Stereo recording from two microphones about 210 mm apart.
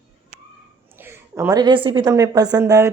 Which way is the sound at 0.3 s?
35° right (ahead or behind).